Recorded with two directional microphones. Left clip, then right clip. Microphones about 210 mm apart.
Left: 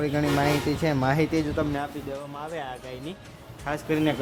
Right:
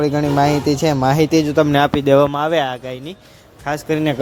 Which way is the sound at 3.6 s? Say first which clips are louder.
Right 7 dB; 25° right (ahead or behind).